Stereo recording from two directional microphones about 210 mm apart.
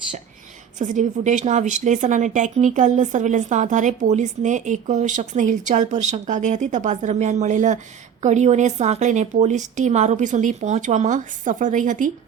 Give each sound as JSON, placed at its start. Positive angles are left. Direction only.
{"t": 0.8, "sound": "a woman's voice", "side_deg": -35}